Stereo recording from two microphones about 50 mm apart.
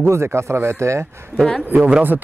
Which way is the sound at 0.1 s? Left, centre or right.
Right.